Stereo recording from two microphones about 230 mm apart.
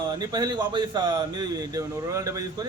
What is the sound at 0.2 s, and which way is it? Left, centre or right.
Speech, centre.